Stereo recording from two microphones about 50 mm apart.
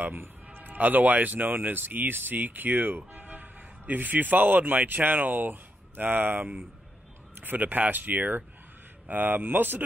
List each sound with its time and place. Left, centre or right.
0.0 s speech: right